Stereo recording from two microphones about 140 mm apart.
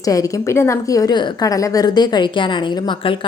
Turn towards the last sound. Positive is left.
turn(degrees=35)  # may be behind; listen again after turning